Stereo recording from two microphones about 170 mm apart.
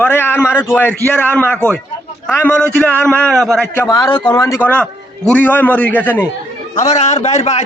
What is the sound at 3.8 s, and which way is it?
A man's voice, 20° left (ahead or behind).